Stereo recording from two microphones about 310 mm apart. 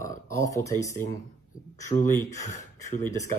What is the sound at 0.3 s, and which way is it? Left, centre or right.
Speech, centre.